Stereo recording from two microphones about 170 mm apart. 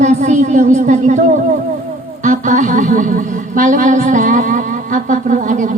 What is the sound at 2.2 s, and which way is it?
Speech, 45° right (ahead or behind).